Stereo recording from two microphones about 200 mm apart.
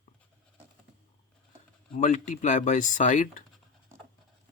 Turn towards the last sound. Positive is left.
turn(degrees=40)  # may be behind; listen again after turning